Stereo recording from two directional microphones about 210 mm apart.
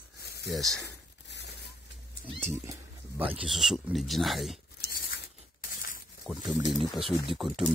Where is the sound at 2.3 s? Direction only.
10° right (ahead or behind).